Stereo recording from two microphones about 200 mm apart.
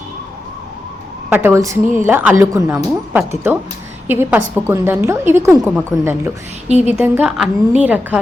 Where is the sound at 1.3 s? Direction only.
10° right (ahead or behind).